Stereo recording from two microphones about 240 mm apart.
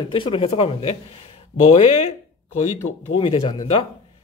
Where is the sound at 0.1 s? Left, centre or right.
Left.